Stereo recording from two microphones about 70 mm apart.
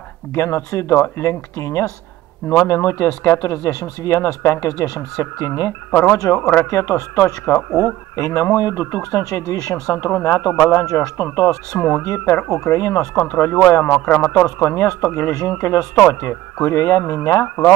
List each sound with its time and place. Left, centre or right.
0.3 s speech: left
0.9 s speech: left
5.9 s speech: centre
6.1 s speech: left
11.7 s speech: centre
12.6 s speech: left
13.8 s speech: left
14.2 s speech: left
16.6 s speech: left